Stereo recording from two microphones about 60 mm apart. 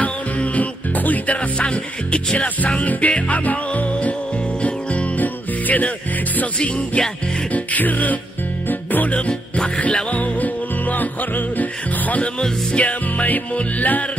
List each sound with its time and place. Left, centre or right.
0.0 s music: left